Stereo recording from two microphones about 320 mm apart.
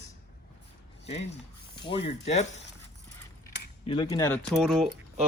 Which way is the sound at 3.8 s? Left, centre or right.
Centre.